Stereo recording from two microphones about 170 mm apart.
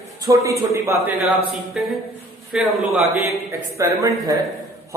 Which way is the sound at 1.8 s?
5° right (ahead or behind).